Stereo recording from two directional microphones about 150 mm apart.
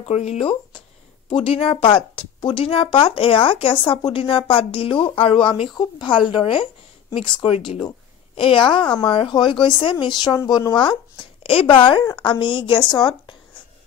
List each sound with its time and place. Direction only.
0.0 s speech: 45° left (ahead or behind)